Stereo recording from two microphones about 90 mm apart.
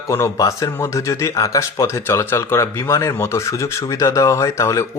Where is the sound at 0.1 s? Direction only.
35° left (ahead or behind).